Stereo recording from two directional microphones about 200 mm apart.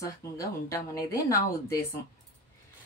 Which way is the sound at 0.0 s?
15° left (ahead or behind).